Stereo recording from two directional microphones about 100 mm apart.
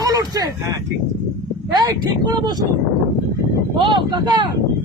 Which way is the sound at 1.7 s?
45° right (ahead or behind).